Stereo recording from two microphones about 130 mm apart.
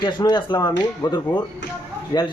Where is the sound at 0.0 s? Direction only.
35° left (ahead or behind).